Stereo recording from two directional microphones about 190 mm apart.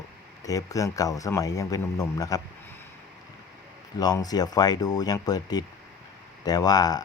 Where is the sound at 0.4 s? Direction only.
20° left (ahead or behind).